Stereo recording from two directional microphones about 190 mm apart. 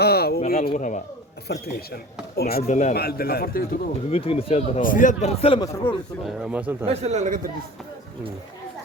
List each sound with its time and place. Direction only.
0.0 s speech: 55° left (ahead or behind)
1.5 s speech: 55° left (ahead or behind)
2.6 s a man's voice: 40° left (ahead or behind)
2.9 s speech: 55° left (ahead or behind)
4.1 s a man's voice: 30° left (ahead or behind)
5.6 s a man's voice: 15° left (ahead or behind)
6.2 s a man's voice: 5° right (ahead or behind)
6.8 s a man's voice: 35° right (ahead or behind)